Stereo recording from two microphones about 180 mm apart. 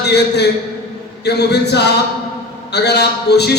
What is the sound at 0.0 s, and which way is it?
A man's voice, 65° left (ahead or behind).